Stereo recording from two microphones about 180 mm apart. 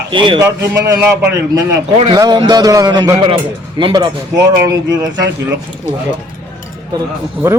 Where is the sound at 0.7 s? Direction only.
15° right (ahead or behind).